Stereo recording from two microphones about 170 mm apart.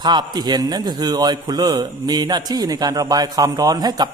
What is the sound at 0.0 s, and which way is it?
A man's voice, 25° right (ahead or behind).